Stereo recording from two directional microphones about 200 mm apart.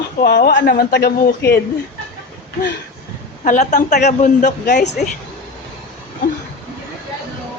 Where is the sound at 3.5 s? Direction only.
40° left (ahead or behind).